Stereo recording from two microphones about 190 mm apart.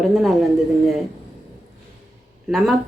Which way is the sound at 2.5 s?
Centre (ahead or behind).